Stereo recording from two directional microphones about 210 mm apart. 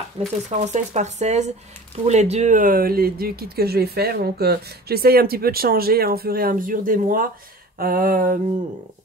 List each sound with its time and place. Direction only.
0.2 s speech: 25° right (ahead or behind); by 8.4 s 40° right (ahead or behind)